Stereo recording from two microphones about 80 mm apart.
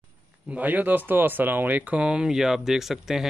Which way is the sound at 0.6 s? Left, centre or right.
Right.